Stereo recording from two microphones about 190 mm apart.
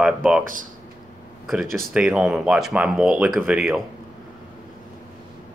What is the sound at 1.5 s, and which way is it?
Speech, centre (ahead or behind).